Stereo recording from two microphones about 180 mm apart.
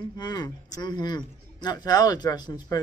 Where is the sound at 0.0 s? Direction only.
25° left (ahead or behind).